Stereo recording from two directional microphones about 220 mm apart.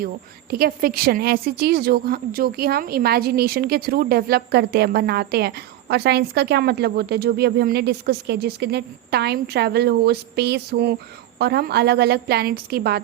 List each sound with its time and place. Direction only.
0.5 s a woman's voice: 45° right (ahead or behind)